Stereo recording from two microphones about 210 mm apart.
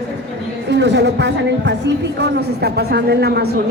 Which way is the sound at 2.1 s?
50° right (ahead or behind).